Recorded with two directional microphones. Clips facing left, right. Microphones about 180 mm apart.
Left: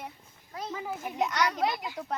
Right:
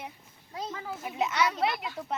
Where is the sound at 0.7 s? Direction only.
15° left (ahead or behind).